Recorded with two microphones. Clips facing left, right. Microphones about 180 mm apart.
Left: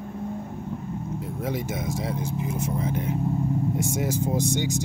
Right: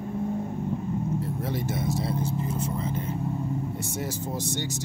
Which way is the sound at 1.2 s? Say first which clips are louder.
Left 1 dB; 15° left (ahead or behind).